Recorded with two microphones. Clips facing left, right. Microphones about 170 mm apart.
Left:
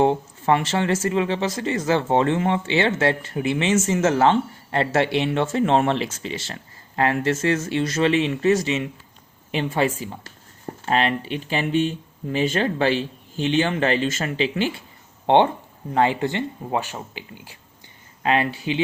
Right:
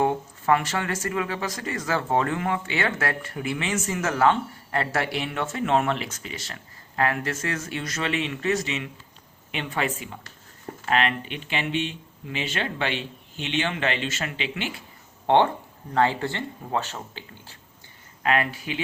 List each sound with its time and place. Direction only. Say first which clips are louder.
0.0 s speech: left 4 dB; 25° left (ahead or behind)
15.3 s speech: left 3 dB; 20° left (ahead or behind)
18.2 s speech: left 3 dB; 25° left (ahead or behind)